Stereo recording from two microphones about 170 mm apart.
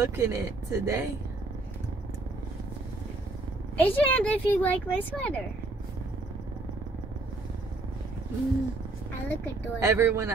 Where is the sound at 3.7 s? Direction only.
10° left (ahead or behind).